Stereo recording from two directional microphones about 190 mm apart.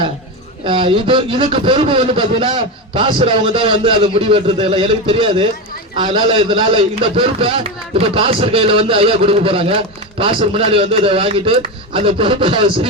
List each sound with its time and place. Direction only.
0.6 s a man's voice: 25° right (ahead or behind)